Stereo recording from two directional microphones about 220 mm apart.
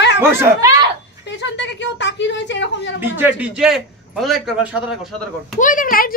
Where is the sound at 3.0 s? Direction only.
10° right (ahead or behind).